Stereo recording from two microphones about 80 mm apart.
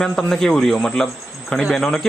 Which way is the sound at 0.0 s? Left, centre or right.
Centre.